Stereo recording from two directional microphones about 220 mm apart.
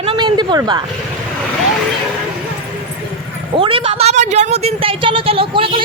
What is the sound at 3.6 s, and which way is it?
A woman's voice, 25° right (ahead or behind).